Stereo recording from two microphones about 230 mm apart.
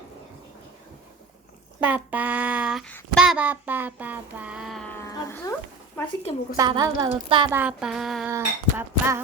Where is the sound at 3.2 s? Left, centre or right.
Centre.